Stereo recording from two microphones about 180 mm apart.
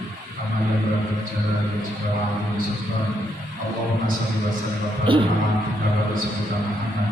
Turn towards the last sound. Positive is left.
turn(degrees=-30)  # may be behind; listen again after turning